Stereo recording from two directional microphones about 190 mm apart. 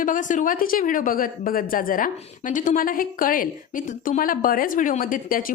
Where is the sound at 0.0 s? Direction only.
45° left (ahead or behind).